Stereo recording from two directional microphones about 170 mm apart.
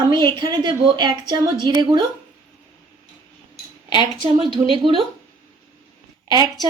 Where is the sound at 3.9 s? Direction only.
30° right (ahead or behind).